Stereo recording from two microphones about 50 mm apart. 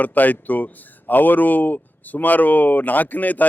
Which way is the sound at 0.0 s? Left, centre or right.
Left.